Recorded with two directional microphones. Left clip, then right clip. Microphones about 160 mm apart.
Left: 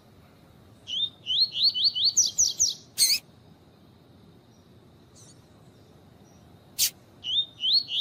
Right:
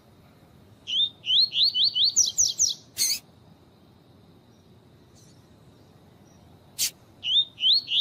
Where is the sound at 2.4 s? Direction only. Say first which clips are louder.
Right 1 dB; centre (ahead or behind).